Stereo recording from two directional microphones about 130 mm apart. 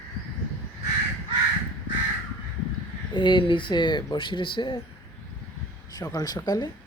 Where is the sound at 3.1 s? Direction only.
40° left (ahead or behind).